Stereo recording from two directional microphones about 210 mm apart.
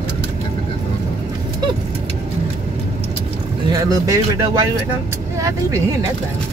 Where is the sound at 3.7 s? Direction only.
15° right (ahead or behind).